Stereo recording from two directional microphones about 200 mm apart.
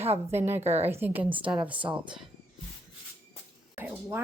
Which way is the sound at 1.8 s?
25° right (ahead or behind).